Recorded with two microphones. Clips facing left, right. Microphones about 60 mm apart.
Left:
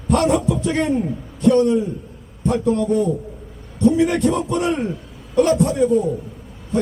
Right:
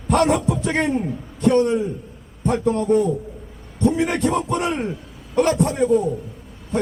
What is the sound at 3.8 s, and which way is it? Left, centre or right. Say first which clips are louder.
A man's voice: left 3 dB; right.